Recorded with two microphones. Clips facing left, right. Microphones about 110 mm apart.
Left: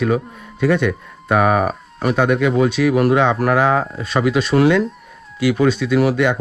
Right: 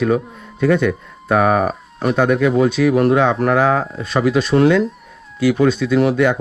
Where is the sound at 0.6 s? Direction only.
45° right (ahead or behind).